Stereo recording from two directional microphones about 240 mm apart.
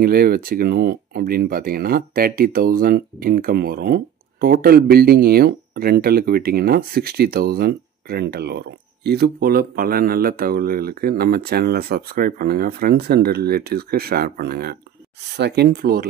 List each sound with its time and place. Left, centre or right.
0.0 s speech: right